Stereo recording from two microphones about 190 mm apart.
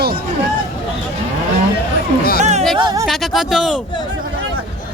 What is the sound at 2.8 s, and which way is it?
Speech, 20° right (ahead or behind).